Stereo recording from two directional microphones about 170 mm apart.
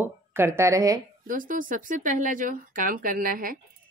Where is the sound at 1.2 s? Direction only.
50° right (ahead or behind).